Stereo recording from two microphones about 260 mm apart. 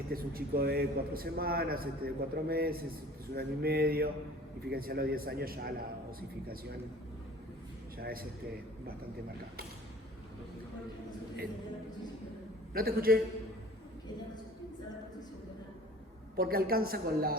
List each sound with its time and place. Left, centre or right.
0.1 s a man's voice: right
7.9 s a man's voice: right
12.7 s a man's voice: right
16.4 s a man's voice: right